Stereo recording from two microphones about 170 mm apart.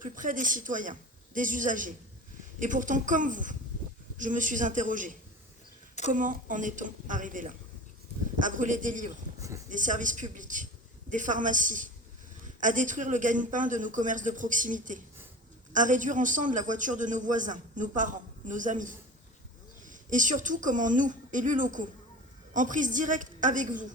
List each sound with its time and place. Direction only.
0.0 s a man's voice: 50° right (ahead or behind)